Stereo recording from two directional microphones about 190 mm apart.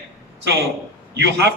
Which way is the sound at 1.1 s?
65° right (ahead or behind).